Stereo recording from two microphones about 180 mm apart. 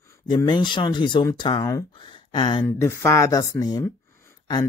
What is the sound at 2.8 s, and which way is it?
Speech, 15° left (ahead or behind).